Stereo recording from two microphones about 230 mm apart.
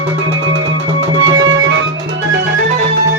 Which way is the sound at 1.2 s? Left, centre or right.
Right.